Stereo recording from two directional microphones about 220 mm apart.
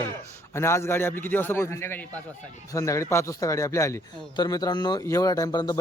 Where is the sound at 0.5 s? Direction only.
10° left (ahead or behind).